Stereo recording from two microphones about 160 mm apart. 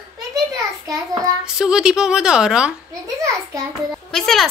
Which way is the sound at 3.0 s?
20° right (ahead or behind).